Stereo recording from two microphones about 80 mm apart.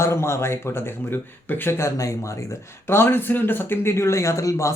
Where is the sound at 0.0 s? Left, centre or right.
Left.